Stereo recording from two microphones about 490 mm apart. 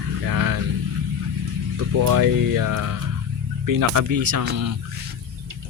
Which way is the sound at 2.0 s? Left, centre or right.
Right.